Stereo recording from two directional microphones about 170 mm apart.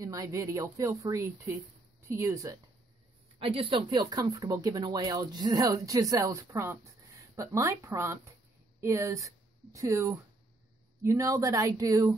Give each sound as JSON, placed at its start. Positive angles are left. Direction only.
{"t": 0.0, "sound": "speech", "side_deg": -20}
{"t": 3.3, "sound": "speech", "side_deg": -35}